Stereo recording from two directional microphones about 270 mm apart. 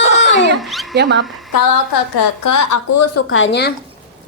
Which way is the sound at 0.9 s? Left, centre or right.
Right.